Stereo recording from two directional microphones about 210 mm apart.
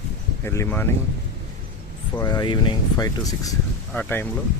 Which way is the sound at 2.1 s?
15° left (ahead or behind).